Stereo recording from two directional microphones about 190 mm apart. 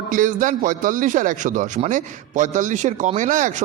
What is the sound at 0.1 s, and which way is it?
A man's voice, 45° right (ahead or behind).